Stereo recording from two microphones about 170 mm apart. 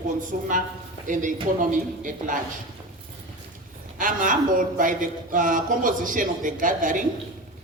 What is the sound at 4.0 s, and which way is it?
A woman's voice, 50° right (ahead or behind).